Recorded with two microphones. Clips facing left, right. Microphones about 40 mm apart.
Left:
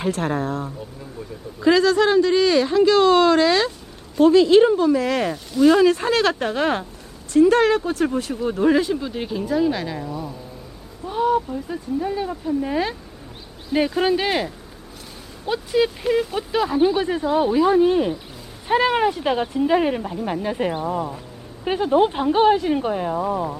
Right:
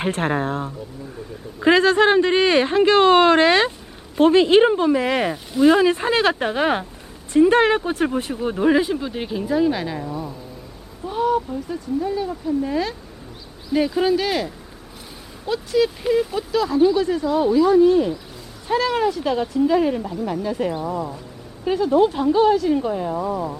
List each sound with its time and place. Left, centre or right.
0.0 s speech: right; by 10.3 s centre
11.0 s a sound: centre
11.9 s speech: centre
14.0 s speech: left